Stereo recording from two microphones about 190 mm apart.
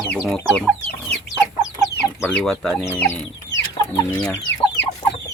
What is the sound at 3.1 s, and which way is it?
Chicken, 15° left (ahead or behind).